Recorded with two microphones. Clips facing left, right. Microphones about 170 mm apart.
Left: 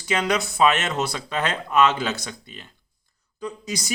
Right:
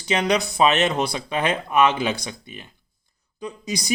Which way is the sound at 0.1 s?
20° right (ahead or behind).